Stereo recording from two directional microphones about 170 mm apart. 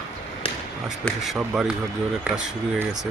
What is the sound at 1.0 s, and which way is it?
Speech, centre (ahead or behind).